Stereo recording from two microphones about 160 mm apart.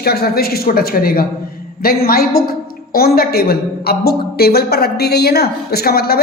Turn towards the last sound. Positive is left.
turn(degrees=75)  # may be behind; listen again after turning